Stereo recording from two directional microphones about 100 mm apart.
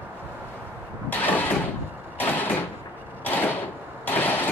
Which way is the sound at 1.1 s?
20° left (ahead or behind).